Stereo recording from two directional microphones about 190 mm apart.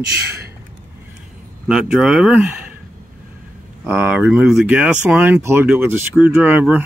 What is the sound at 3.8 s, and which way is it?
Speech, 5° right (ahead or behind).